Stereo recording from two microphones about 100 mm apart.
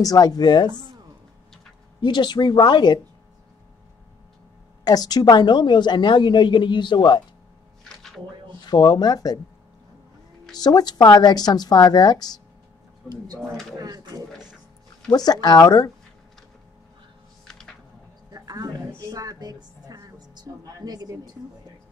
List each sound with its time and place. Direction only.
0.0 s a woman's voice: 40° left (ahead or behind)
2.0 s a woman's voice: 50° left (ahead or behind)
4.8 s a woman's voice: 40° left (ahead or behind)
7.9 s a sound: 5° left (ahead or behind)
8.6 s speech: 45° left (ahead or behind)
10.5 s speech: 40° left (ahead or behind)
13.4 s speech: centre (ahead or behind)
13.7 s speech: 40° right (ahead or behind)
15.0 s a woman's voice: 40° left (ahead or behind)
17.5 s music: 5° left (ahead or behind)
18.3 s a sound: 40° right (ahead or behind)
18.9 s a woman's voice: 35° right (ahead or behind)